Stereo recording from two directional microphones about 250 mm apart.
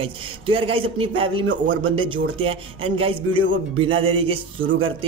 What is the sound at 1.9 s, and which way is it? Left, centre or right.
A man's voice, centre.